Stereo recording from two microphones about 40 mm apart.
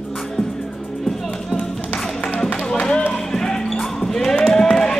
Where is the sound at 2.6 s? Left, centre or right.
Centre.